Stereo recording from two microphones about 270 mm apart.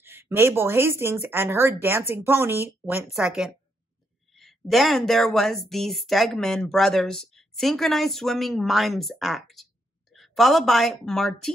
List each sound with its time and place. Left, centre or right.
0.0 s a woman's voice: centre